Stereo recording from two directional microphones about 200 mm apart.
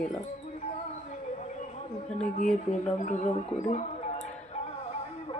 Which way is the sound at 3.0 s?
35° left (ahead or behind).